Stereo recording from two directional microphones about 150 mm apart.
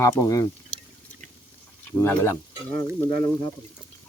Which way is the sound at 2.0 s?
15° left (ahead or behind).